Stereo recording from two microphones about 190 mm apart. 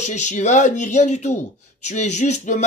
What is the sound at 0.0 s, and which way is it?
Speech, 40° left (ahead or behind).